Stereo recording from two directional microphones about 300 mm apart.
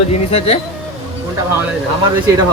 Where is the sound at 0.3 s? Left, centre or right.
Centre.